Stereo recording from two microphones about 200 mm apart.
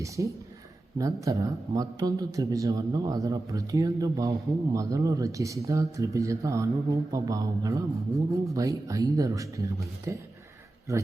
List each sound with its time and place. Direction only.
0.0 s a man's voice: 15° right (ahead or behind)